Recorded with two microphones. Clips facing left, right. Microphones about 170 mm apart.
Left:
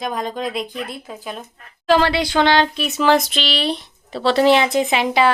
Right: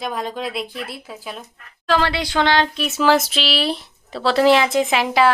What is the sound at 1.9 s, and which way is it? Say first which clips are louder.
Speech: left 4 dB; 10° left (ahead or behind).